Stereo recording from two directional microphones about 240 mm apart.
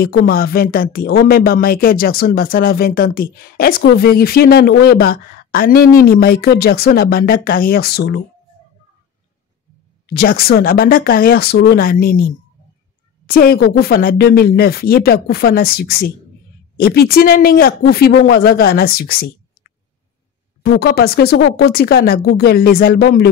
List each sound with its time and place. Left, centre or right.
0.0 s speech: left
10.0 s speech: left
20.6 s speech: left